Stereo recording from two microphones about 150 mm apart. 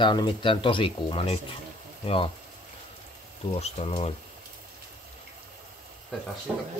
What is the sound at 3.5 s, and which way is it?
Speech, 45° left (ahead or behind).